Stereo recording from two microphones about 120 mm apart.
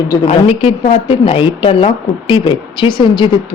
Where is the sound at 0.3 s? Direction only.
55° left (ahead or behind).